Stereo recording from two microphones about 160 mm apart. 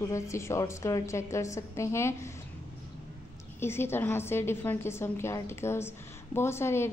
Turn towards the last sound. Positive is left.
turn(degrees=15)  # may be behind; listen again after turning